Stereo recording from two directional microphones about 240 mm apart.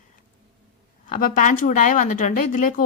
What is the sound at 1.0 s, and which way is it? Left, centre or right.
Speech, left.